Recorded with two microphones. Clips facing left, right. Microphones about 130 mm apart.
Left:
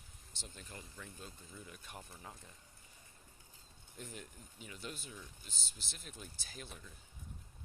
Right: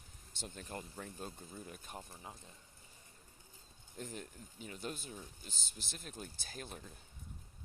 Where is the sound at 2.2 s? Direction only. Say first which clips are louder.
Right 1 dB; 20° right (ahead or behind).